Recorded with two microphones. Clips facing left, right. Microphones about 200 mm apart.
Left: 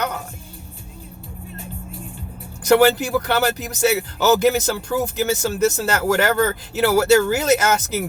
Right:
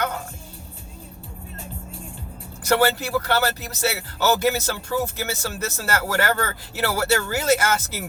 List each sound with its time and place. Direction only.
2.7 s speech: 15° left (ahead or behind)